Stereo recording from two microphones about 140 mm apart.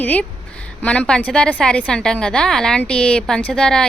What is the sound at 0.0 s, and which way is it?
A woman's voice, 15° left (ahead or behind).